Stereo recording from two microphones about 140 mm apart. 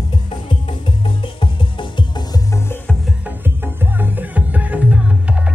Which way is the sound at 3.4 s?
15° right (ahead or behind).